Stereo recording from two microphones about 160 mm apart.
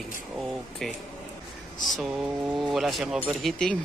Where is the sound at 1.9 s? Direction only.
Centre (ahead or behind).